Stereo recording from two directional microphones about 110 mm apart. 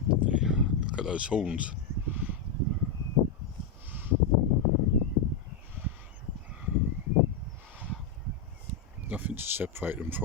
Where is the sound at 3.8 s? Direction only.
20° right (ahead or behind).